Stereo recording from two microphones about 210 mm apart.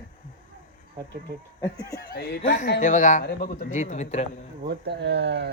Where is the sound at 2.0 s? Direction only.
50° left (ahead or behind).